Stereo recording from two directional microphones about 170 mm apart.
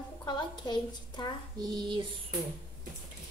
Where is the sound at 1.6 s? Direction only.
25° right (ahead or behind).